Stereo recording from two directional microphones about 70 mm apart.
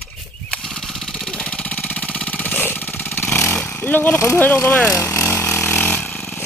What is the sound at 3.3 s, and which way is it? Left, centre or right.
Vehicle, centre.